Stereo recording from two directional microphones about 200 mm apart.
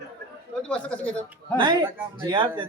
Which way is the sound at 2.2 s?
20° right (ahead or behind).